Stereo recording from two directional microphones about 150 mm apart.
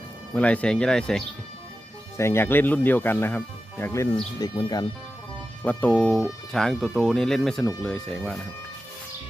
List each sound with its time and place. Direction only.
0.3 s speech: 10° left (ahead or behind)
2.1 s speech: 15° left (ahead or behind)
5.6 s speech: 10° left (ahead or behind)